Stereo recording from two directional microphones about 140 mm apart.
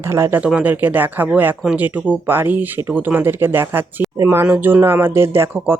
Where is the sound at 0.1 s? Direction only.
15° right (ahead or behind).